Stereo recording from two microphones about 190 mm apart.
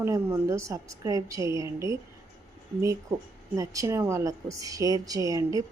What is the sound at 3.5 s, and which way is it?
A woman's voice, 15° right (ahead or behind).